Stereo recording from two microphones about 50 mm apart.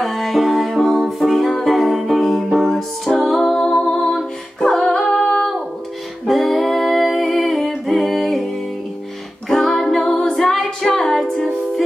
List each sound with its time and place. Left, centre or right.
0.0 s music: centre
3.4 s music: centre
6.2 s singing: centre
9.5 s music: centre